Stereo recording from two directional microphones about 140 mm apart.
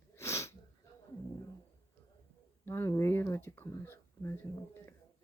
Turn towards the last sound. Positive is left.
turn(degrees=20)  # may be behind; listen again after turning